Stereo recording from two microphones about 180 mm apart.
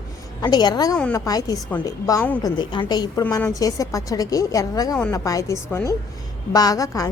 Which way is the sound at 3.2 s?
10° left (ahead or behind).